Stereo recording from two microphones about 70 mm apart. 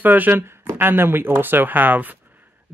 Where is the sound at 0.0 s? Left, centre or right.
Right.